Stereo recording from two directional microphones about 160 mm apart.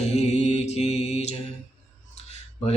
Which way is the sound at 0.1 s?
45° left (ahead or behind).